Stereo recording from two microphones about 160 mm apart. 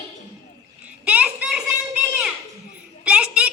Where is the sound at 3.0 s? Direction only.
10° right (ahead or behind).